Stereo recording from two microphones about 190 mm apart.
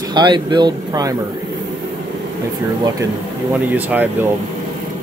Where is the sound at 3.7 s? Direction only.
10° right (ahead or behind).